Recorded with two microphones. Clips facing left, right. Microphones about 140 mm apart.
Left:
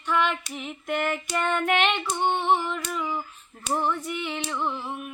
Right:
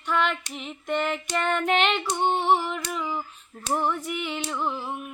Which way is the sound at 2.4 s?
5° right (ahead or behind).